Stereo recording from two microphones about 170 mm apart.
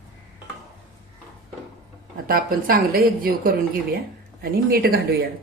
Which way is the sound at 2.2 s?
60° right (ahead or behind).